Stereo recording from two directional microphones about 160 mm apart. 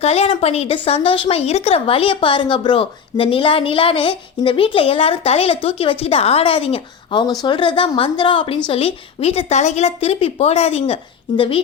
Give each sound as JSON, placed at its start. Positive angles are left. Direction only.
{"t": 0.0, "sound": "speech", "side_deg": 40}